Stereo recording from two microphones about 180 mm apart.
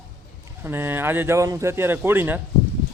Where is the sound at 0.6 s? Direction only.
10° right (ahead or behind).